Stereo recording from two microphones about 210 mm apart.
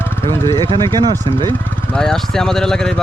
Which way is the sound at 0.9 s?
20° right (ahead or behind).